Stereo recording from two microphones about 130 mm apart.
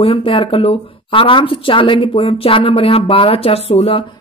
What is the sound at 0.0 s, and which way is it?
Speech, 45° left (ahead or behind).